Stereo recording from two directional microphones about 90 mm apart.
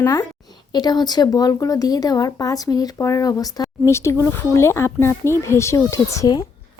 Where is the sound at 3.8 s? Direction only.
30° left (ahead or behind).